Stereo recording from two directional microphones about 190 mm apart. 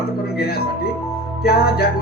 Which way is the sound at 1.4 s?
55° left (ahead or behind).